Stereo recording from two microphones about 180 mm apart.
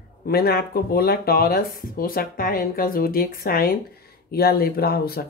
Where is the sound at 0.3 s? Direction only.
60° left (ahead or behind).